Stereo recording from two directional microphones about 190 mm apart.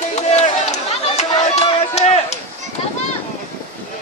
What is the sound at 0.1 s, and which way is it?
Run, 35° left (ahead or behind).